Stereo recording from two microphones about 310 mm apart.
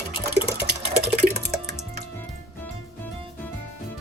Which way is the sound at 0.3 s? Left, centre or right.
Right.